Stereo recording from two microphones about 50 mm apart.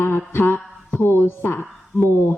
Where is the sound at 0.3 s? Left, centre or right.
Left.